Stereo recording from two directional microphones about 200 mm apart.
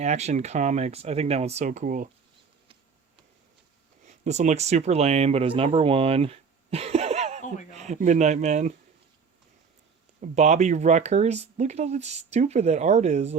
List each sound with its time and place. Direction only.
0.0 s speech: 35° right (ahead or behind)
4.0 s speech: 35° right (ahead or behind)
10.2 s speech: 35° right (ahead or behind)